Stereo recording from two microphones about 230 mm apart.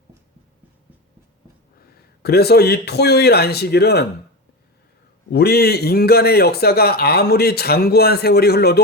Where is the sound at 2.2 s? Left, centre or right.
Left.